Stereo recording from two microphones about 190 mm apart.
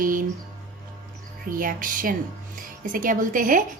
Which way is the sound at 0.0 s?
45° right (ahead or behind).